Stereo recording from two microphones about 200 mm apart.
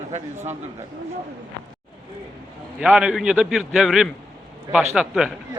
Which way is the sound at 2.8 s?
5° right (ahead or behind).